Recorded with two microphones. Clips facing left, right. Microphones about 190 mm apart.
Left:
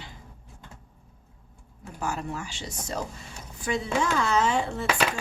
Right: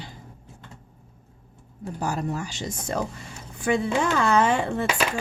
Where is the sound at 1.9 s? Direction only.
35° right (ahead or behind).